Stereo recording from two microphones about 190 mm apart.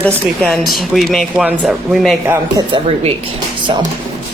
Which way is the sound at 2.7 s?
25° right (ahead or behind).